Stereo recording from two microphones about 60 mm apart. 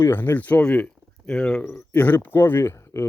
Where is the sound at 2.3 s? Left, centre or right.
Left.